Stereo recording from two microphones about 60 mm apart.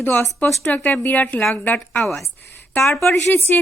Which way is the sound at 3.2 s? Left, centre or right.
Left.